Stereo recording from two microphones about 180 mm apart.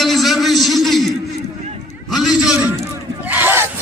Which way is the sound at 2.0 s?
Centre (ahead or behind).